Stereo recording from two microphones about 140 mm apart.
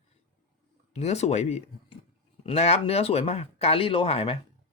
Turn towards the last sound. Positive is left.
turn(degrees=40)  # may be behind; listen again after turning